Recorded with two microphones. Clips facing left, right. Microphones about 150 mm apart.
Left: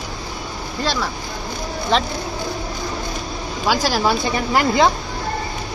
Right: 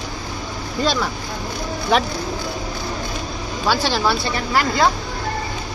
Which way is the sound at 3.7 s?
10° left (ahead or behind).